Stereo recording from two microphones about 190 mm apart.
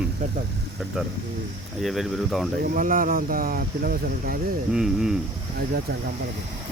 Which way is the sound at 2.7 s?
45° right (ahead or behind).